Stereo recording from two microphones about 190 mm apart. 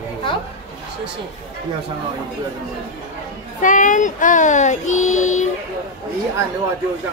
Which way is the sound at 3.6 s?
45° left (ahead or behind).